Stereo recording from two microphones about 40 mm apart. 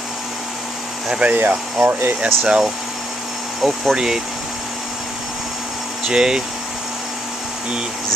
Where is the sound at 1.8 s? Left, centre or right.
Right.